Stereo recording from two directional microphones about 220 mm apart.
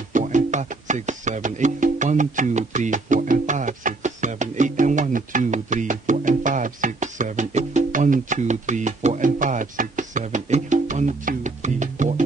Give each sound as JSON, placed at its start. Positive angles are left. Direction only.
{"t": 0.1, "sound": "music", "side_deg": -35}